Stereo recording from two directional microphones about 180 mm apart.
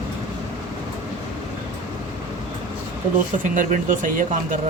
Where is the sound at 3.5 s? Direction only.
45° right (ahead or behind).